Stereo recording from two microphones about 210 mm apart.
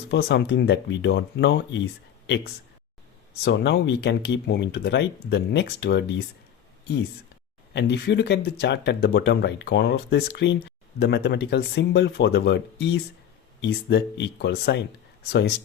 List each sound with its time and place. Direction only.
0.1 s speech: 55° left (ahead or behind)
7.7 s speech: 55° left (ahead or behind)